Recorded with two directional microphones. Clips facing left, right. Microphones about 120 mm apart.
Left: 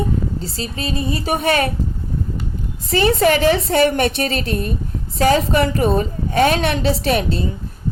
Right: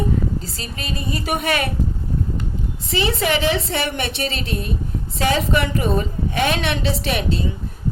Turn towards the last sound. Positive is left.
turn(degrees=40)  # may be behind; listen again after turning